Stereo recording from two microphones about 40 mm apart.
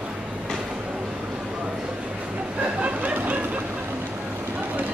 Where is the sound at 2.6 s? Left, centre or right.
Right.